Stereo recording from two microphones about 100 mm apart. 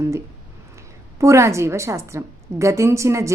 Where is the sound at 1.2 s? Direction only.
30° right (ahead or behind).